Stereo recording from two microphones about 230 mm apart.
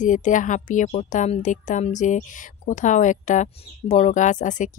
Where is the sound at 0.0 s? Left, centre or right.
Left.